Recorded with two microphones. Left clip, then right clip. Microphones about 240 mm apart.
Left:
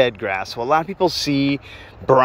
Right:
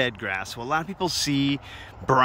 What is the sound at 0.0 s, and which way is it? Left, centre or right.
Speech, centre.